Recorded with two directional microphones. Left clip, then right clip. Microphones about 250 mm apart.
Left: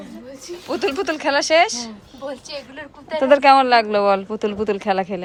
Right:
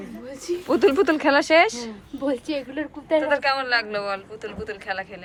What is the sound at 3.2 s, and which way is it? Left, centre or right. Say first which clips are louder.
Speech: left 10 dB; left.